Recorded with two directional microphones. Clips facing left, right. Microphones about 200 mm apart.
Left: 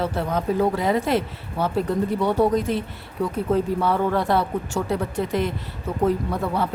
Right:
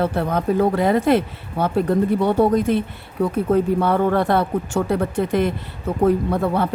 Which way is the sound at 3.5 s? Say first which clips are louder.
Right 3 dB; 55° right (ahead or behind).